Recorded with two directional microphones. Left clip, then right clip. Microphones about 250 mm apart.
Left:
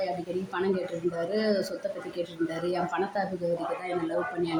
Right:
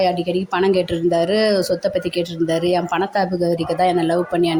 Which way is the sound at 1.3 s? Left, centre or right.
Right.